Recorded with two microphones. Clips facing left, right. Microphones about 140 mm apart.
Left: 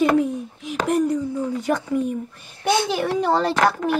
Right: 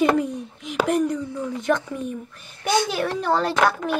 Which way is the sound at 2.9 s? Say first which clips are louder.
Left 3 dB; 10° left (ahead or behind).